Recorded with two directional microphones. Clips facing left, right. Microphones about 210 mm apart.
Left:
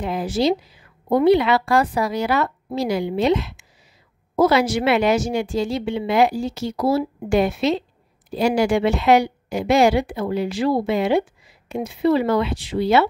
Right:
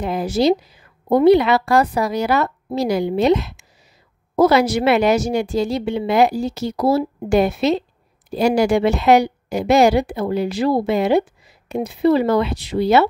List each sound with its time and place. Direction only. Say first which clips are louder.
0.0 s speech: right 3 dB; 40° right (ahead or behind)